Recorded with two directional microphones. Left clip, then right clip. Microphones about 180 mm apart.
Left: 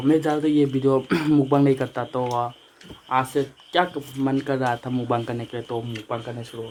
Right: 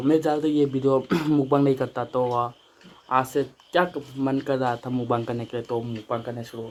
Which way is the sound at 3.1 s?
10° right (ahead or behind).